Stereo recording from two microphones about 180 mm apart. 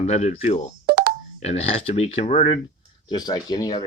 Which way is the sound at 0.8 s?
65° right (ahead or behind).